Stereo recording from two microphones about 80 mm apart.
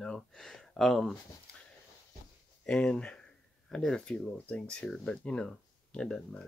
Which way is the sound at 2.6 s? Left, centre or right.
Centre.